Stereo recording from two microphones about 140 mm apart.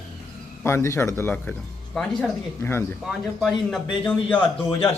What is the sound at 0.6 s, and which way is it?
Speech, 20° left (ahead or behind).